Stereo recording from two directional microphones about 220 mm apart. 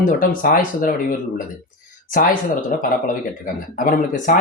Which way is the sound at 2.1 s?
40° left (ahead or behind).